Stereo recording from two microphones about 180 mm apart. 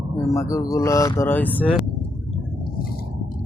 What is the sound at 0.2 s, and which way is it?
Speech, 15° left (ahead or behind).